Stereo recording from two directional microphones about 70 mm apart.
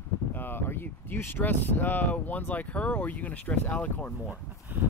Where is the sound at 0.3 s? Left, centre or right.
Left.